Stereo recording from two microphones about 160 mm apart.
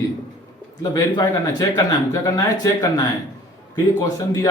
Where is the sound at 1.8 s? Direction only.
25° left (ahead or behind).